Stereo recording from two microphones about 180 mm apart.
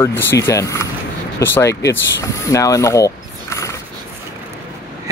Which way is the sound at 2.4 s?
20° left (ahead or behind).